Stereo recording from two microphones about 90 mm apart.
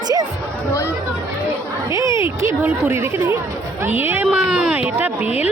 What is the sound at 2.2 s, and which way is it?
A woman's voice, 30° right (ahead or behind).